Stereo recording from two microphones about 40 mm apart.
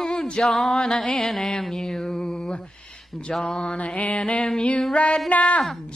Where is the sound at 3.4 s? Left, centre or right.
Left.